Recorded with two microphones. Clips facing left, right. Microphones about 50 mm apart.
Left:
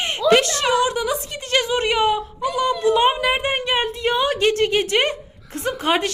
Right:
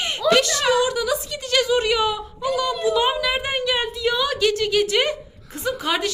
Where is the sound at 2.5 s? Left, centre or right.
Left.